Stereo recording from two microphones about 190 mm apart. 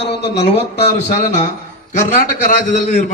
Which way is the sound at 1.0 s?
40° left (ahead or behind).